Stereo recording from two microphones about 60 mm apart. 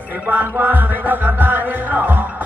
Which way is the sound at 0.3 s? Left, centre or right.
Right.